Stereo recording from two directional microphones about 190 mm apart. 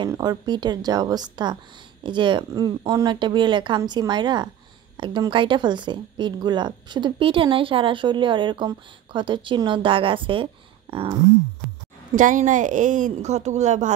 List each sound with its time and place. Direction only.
0.0 s speech: 20° right (ahead or behind)
12.2 s speech: 45° right (ahead or behind)